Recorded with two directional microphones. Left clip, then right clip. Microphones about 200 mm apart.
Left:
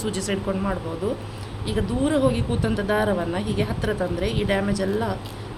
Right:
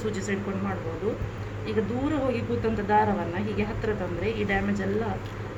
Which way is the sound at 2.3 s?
45° left (ahead or behind).